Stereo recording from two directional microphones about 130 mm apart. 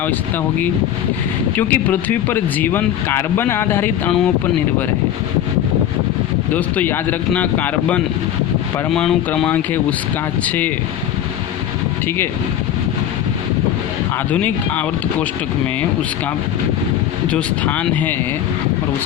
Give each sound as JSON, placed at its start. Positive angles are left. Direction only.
{"t": 1.5, "sound": "speech", "side_deg": 15}
{"t": 6.5, "sound": "speech", "side_deg": 10}
{"t": 12.0, "sound": "speech", "side_deg": 15}
{"t": 14.3, "sound": "speech", "side_deg": 10}
{"t": 17.2, "sound": "speech", "side_deg": 10}